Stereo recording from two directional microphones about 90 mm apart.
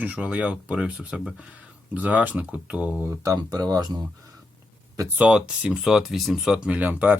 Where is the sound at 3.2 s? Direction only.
40° right (ahead or behind).